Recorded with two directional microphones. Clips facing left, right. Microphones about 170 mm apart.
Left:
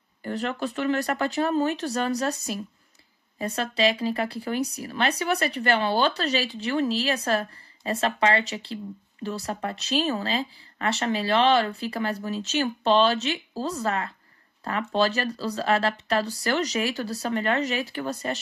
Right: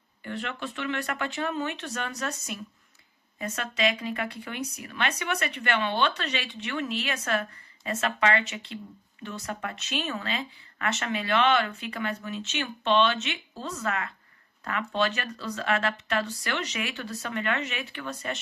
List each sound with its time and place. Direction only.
0.2 s speech: 40° left (ahead or behind)